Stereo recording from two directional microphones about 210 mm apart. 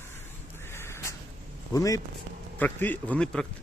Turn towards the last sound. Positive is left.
turn(degrees=5)  # may be behind; listen again after turning